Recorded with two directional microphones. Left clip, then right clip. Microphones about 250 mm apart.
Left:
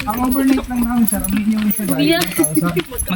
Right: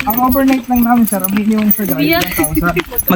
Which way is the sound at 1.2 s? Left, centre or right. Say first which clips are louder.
Right 4 dB; centre.